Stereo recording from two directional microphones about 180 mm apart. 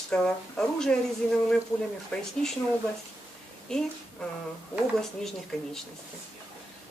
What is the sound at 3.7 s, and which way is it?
A woman's voice, 5° left (ahead or behind).